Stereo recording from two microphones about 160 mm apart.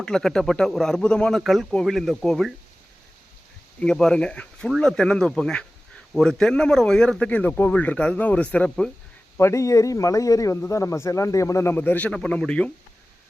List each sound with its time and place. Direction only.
0.0 s speech: 5° left (ahead or behind)
3.8 s speech: 5° left (ahead or behind)
9.4 s speech: 20° left (ahead or behind)